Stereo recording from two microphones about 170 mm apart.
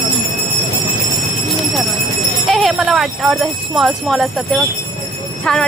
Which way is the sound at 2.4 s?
Centre (ahead or behind).